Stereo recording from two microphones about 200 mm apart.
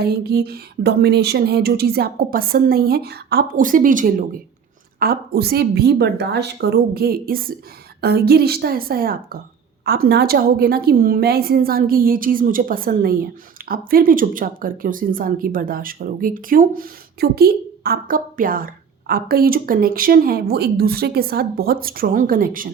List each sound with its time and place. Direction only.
0.0 s speech: 50° right (ahead or behind)